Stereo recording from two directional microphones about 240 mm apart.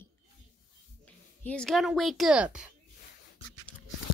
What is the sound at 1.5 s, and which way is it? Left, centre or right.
A woman's voice, centre.